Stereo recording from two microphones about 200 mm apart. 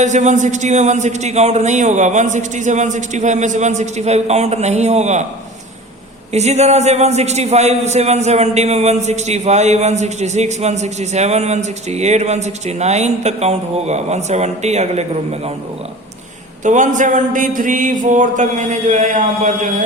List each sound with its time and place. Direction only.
0.0 s a man's voice: 35° right (ahead or behind)
6.3 s a man's voice: 35° right (ahead or behind)
16.6 s a man's voice: 40° right (ahead or behind)